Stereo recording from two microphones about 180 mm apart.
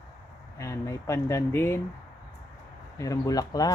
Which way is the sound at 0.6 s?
15° left (ahead or behind).